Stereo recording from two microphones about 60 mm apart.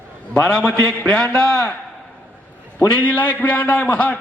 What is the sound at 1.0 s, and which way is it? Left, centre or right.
Speech, centre.